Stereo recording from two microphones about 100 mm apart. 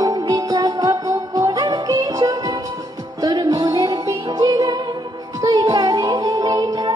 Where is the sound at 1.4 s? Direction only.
50° right (ahead or behind).